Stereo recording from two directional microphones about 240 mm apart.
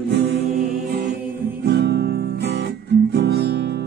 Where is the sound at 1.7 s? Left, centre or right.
Right.